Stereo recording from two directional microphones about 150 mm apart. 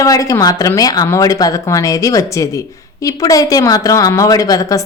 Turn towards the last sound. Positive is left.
turn(degrees=20)  # may be behind; listen again after turning